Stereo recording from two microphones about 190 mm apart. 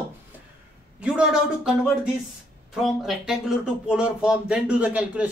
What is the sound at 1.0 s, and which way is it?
Speech, 5° right (ahead or behind).